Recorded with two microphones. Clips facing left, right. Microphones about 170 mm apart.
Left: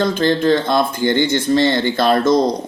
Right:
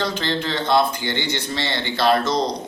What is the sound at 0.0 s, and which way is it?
Speech, 45° left (ahead or behind).